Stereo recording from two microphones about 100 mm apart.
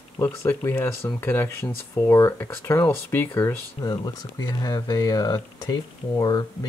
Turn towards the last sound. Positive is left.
turn(degrees=40)  # may be behind; listen again after turning